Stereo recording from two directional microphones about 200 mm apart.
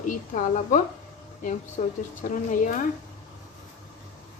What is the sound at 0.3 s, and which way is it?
Speech, 40° left (ahead or behind).